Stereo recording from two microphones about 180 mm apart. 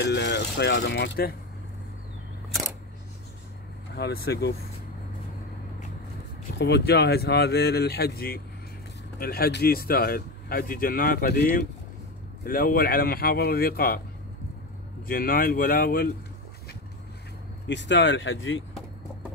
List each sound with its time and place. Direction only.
0.0 s speech: 70° left (ahead or behind)
3.9 s speech: 60° left (ahead or behind)
6.6 s speech: 70° left (ahead or behind)
12.4 s speech: 55° left (ahead or behind)
15.0 s speech: 50° left (ahead or behind)
17.6 s speech: 85° left